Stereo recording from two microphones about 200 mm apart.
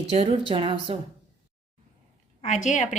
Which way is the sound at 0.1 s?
30° right (ahead or behind).